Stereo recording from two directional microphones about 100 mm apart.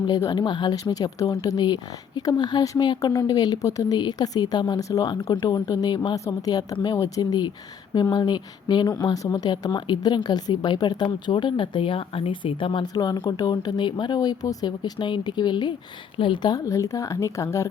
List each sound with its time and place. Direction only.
0.3 s speech: 45° left (ahead or behind)
6.1 s speech: 35° left (ahead or behind); by 12.8 s 60° left (ahead or behind)
12.9 s speech: 40° left (ahead or behind)